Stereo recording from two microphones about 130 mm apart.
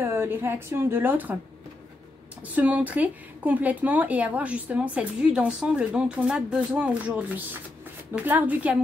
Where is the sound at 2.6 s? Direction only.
10° right (ahead or behind).